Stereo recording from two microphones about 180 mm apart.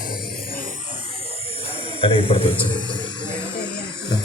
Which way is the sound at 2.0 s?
30° left (ahead or behind).